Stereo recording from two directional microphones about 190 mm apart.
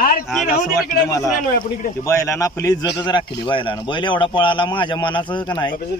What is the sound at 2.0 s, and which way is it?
A man's voice, 15° left (ahead or behind).